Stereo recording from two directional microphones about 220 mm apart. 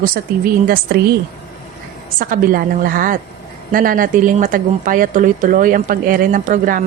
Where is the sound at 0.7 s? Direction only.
45° right (ahead or behind).